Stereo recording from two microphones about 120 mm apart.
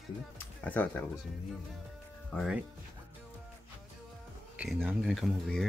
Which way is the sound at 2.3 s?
5° left (ahead or behind).